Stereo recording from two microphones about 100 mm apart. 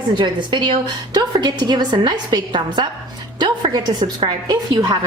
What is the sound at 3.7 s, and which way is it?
A woman's voice, 40° right (ahead or behind).